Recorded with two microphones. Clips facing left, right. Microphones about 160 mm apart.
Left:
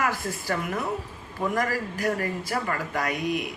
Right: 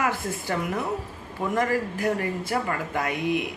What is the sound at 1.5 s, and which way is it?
A woman's voice, 25° right (ahead or behind).